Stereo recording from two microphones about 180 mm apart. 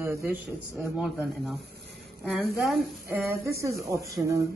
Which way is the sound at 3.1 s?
15° right (ahead or behind).